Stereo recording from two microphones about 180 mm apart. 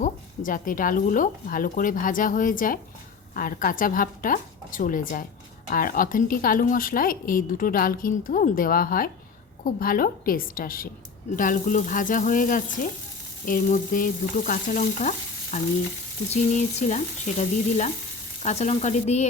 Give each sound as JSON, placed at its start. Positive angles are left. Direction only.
{"t": 0.0, "sound": "a woman's voice", "side_deg": 50}
{"t": 15.5, "sound": "frying", "side_deg": 40}